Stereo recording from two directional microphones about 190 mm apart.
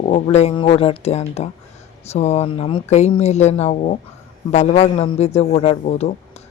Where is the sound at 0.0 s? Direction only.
35° left (ahead or behind).